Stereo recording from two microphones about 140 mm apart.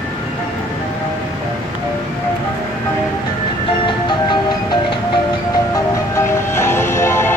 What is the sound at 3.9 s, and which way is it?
Music, 35° left (ahead or behind).